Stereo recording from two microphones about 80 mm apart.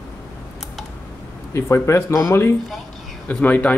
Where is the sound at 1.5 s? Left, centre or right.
Left.